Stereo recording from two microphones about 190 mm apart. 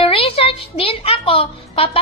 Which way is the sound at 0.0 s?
30° left (ahead or behind).